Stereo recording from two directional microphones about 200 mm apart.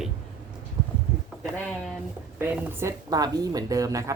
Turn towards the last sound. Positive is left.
turn(degrees=-15)  # may be behind; listen again after turning